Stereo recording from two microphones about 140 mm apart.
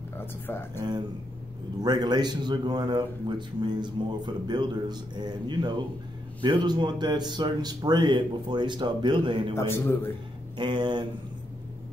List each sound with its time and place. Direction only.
0.5 s speech: 15° left (ahead or behind)
1.8 s a man's voice: 30° right (ahead or behind)
9.6 s a man's voice: 20° left (ahead or behind)
10.6 s a man's voice: 35° right (ahead or behind)